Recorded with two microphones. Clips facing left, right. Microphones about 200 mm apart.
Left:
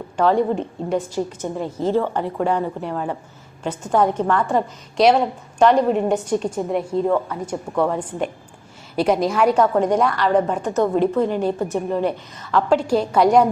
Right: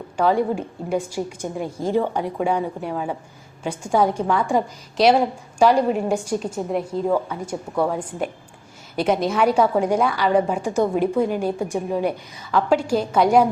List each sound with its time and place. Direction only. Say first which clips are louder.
0.2 s a woman's voice: left 2 dB; 5° right (ahead or behind)